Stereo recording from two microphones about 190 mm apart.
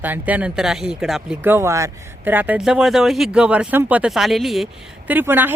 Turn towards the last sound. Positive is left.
turn(degrees=-10)  # may be behind; listen again after turning